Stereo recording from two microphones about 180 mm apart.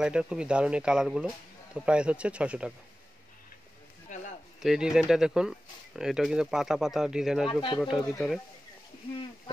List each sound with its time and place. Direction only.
0.0 s speech: 5° right (ahead or behind)
4.1 s a sound: 40° left (ahead or behind)
4.6 s speech: 5° right (ahead or behind)